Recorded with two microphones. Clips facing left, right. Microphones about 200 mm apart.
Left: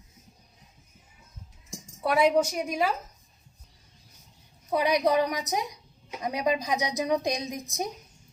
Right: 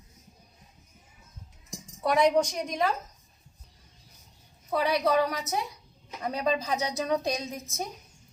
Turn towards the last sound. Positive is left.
turn(degrees=15)  # may be behind; listen again after turning